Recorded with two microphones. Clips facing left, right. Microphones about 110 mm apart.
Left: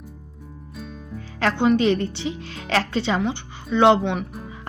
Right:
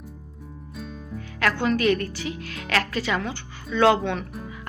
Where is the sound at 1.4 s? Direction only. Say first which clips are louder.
Left 4 dB; 25° left (ahead or behind).